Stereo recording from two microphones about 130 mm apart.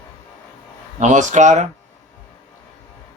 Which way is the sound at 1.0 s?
70° right (ahead or behind).